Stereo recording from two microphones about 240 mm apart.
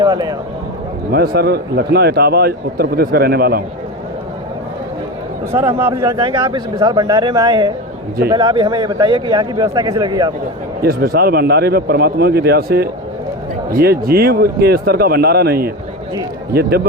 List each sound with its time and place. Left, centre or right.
0.0 s speech: centre
1.1 s a man's voice: right
5.5 s speech: centre
10.8 s a man's voice: right